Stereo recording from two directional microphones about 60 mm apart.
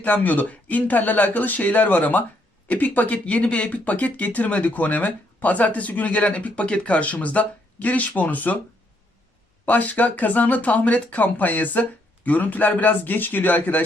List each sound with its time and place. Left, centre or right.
0.0 s speech: left
9.6 s speech: left